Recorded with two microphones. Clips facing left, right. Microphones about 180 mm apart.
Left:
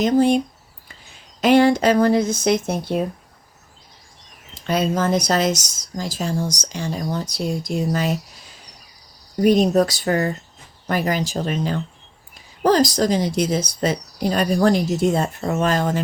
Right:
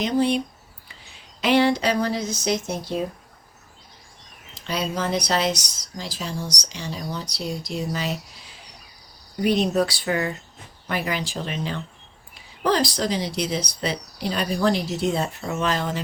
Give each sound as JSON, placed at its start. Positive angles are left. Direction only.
{"t": 0.0, "sound": "speech", "side_deg": 45}
{"t": 4.6, "sound": "speech", "side_deg": 50}
{"t": 9.4, "sound": "speech", "side_deg": 45}